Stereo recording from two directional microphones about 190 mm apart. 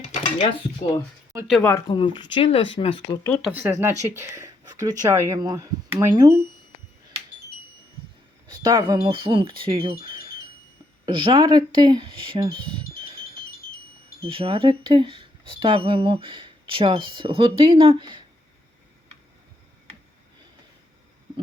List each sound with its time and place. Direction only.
0.1 s speech: 35° left (ahead or behind)
1.3 s speech: 15° right (ahead or behind)
1.9 s speech: 25° left (ahead or behind)
3.4 s speech: 10° right (ahead or behind)
8.4 s speech: 20° right (ahead or behind)
11.0 s speech: 25° right (ahead or behind)
14.3 s speech: 30° right (ahead or behind)